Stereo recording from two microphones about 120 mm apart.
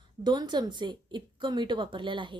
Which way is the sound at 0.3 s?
35° right (ahead or behind).